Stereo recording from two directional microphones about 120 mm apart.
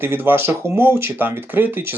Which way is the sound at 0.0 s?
15° right (ahead or behind).